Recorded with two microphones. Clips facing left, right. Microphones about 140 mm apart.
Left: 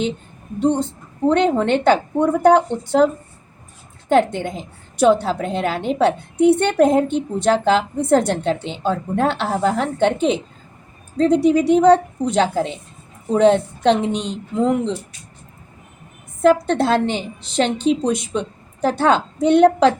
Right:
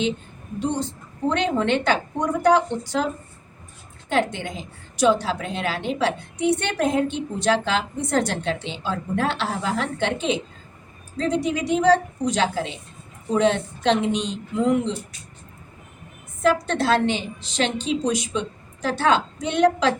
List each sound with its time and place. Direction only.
0.6 s a woman's voice: 55° left (ahead or behind)
4.1 s a woman's voice: 50° left (ahead or behind)
11.4 s a woman's voice: 55° left (ahead or behind)
16.4 s a woman's voice: 55° left (ahead or behind)